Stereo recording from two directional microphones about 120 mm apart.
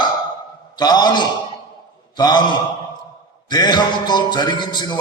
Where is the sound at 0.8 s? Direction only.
35° left (ahead or behind).